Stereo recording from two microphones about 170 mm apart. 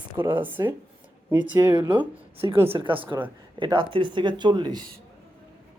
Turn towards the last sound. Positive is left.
turn(degrees=-25)  # may be behind; listen again after turning